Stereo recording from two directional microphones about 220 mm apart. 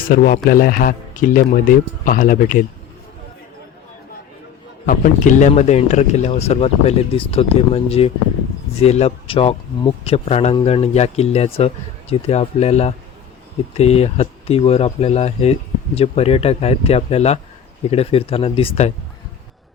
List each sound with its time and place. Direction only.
0.1 s a man's voice: 40° left (ahead or behind)
4.9 s speech: 35° left (ahead or behind)